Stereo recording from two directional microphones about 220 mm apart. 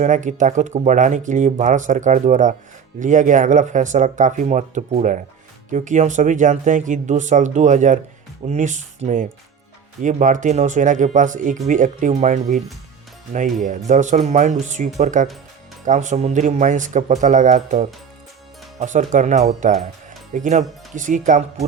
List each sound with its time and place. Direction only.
0.0 s speech: 35° right (ahead or behind)